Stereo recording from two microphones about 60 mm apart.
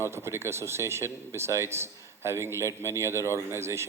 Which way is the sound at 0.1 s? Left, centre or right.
Right.